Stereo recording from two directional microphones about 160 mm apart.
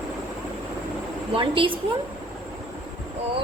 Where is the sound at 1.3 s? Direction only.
35° right (ahead or behind).